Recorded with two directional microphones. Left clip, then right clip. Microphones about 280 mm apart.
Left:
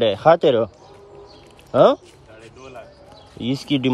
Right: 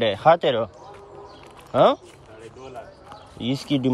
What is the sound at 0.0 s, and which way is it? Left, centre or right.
Speech, centre.